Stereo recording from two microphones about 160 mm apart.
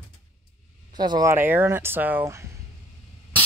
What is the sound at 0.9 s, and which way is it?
Speech, 25° right (ahead or behind).